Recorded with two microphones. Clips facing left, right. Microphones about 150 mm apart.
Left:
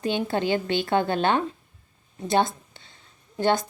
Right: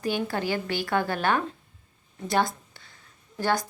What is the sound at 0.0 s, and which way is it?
A woman's voice, 25° left (ahead or behind).